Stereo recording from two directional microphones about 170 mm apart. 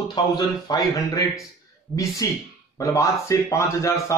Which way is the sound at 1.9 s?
10° left (ahead or behind).